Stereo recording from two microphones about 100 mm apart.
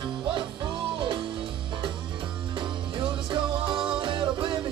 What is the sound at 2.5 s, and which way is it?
Music, 55° right (ahead or behind).